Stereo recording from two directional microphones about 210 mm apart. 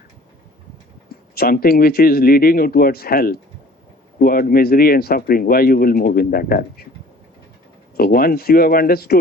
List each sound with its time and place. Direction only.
1.4 s speech: 45° left (ahead or behind)
7.9 s speech: 45° left (ahead or behind)